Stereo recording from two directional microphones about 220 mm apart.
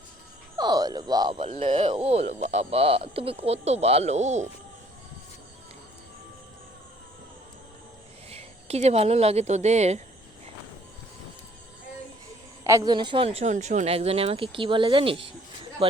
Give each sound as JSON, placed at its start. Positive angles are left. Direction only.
{"t": 0.5, "sound": "speech", "side_deg": -15}
{"t": 8.3, "sound": "speech", "side_deg": -30}
{"t": 12.6, "sound": "speech", "side_deg": -15}